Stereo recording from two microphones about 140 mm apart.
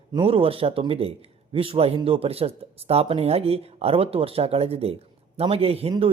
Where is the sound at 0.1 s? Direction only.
35° right (ahead or behind).